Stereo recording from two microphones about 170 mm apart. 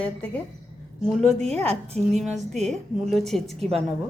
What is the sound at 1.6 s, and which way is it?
Speech, 35° right (ahead or behind).